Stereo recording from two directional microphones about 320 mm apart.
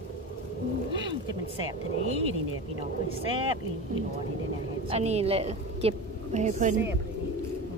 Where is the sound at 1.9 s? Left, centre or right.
Right.